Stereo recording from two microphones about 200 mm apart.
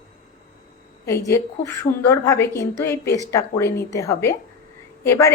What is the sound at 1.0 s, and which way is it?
A woman's voice, 15° left (ahead or behind).